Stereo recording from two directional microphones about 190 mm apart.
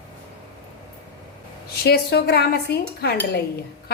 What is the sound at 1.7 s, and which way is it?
A woman's voice, 55° left (ahead or behind).